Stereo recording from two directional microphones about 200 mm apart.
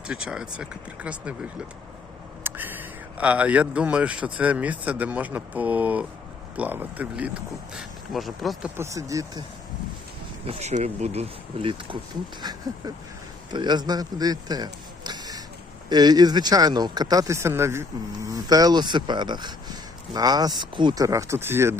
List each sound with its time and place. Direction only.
0.1 s speech: 5° right (ahead or behind)
2.4 s a sound: 10° right (ahead or behind)
3.2 s speech: 5° right (ahead or behind)
8.7 s speech: 15° right (ahead or behind)
10.4 s speech: 30° right (ahead or behind); by 21.8 s 10° right (ahead or behind)